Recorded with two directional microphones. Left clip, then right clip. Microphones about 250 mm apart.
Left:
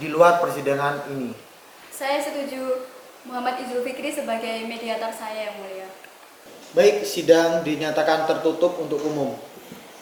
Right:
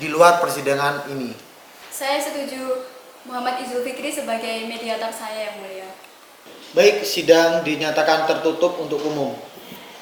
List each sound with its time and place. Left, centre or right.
0.0 s a man's voice: centre
2.0 s a man's voice: centre
6.8 s a man's voice: centre
8.5 s speech: left